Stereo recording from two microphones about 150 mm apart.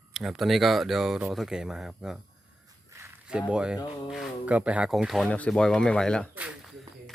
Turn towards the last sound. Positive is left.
turn(degrees=5)  # may be behind; listen again after turning